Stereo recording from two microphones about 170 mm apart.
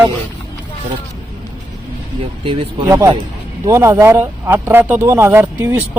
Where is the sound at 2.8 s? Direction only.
20° right (ahead or behind).